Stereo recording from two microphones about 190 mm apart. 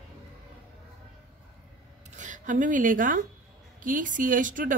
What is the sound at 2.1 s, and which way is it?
A woman's voice, 40° right (ahead or behind).